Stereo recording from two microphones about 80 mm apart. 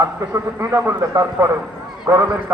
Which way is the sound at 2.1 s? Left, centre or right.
Right.